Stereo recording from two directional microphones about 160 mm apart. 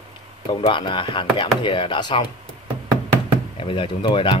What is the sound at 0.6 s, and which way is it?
Speech, 30° left (ahead or behind).